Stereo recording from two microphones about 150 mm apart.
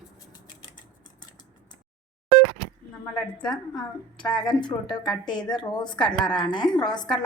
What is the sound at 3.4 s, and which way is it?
A woman's voice, 30° left (ahead or behind).